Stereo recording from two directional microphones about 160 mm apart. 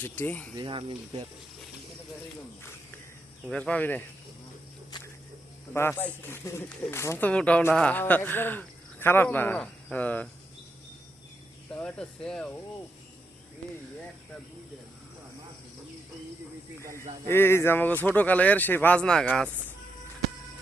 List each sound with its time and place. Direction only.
0.0 s speech: 10° left (ahead or behind)
0.5 s speech: 30° right (ahead or behind)
3.4 s speech: 5° left (ahead or behind)
4.9 s a sound: 25° left (ahead or behind)
5.7 s speech: 10° left (ahead or behind)
11.7 s speech: 5° left (ahead or behind)
17.2 s speech: 15° left (ahead or behind)